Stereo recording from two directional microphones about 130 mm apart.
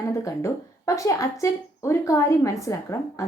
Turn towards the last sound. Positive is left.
turn(degrees=25)  # may be behind; listen again after turning